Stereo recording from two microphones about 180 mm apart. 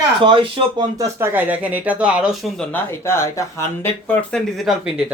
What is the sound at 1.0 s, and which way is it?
Speech, 10° right (ahead or behind).